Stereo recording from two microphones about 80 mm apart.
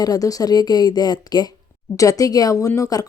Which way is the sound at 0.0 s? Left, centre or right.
Left.